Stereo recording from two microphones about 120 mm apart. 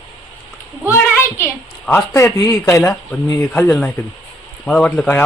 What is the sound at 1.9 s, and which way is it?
Speech, 20° left (ahead or behind).